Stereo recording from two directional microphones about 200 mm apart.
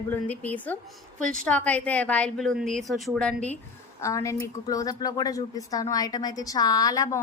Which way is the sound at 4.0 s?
15° left (ahead or behind).